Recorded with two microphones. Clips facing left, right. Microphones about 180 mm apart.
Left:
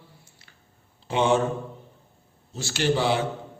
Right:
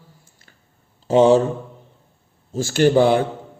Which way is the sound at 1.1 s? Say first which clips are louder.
Right 8 dB; 40° right (ahead or behind).